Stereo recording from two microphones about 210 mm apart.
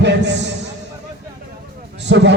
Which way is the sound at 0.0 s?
55° right (ahead or behind).